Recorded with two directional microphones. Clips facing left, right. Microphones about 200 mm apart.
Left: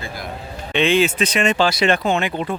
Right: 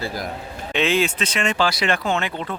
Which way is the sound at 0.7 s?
Centre (ahead or behind).